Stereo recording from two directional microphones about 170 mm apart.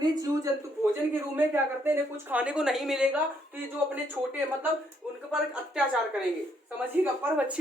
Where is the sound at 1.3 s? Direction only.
10° right (ahead or behind).